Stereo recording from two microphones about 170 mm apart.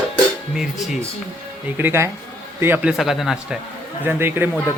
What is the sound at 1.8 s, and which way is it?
A man's voice, 15° right (ahead or behind).